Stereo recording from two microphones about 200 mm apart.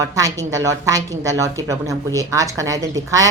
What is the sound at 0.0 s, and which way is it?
A woman's voice, 15° right (ahead or behind).